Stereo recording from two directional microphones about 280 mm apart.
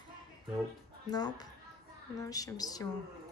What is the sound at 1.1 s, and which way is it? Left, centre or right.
A man's voice, centre.